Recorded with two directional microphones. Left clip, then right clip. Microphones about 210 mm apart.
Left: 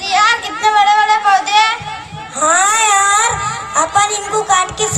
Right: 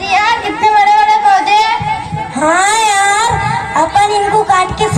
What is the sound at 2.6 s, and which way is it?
Baby cry, 30° left (ahead or behind).